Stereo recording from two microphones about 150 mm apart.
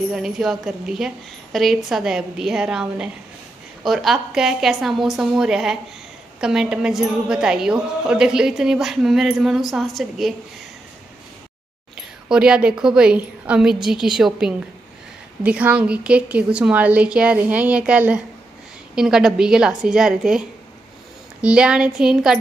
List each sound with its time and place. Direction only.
0.1 s a woman's voice: centre (ahead or behind)
12.3 s a woman's voice: 5° right (ahead or behind)